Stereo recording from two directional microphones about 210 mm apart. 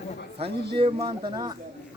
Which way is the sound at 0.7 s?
25° right (ahead or behind).